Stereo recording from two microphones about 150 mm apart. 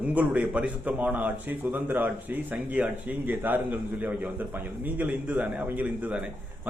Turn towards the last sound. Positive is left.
turn(degrees=-10)  # may be behind; listen again after turning